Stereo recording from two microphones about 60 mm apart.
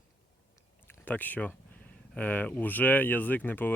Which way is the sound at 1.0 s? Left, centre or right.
Left.